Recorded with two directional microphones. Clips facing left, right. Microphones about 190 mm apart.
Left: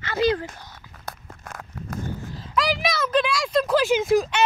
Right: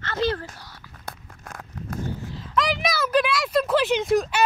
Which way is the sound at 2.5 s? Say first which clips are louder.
Even; centre (ahead or behind).